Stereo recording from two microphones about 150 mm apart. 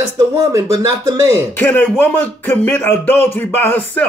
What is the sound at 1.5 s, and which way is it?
Speech, 10° left (ahead or behind).